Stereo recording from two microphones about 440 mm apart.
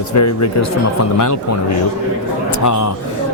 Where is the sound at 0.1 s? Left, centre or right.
Left.